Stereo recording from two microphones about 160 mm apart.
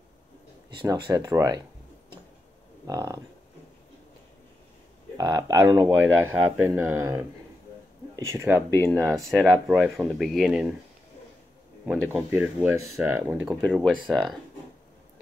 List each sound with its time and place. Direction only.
0.7 s speech: 25° right (ahead or behind)
2.9 s speech: 20° right (ahead or behind)
5.1 s speech: 20° right (ahead or behind)
8.6 s speech: 10° left (ahead or behind)
12.1 s speech: 10° right (ahead or behind)